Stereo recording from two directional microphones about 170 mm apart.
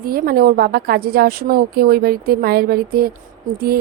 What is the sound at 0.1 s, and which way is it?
A woman's voice, 60° right (ahead or behind).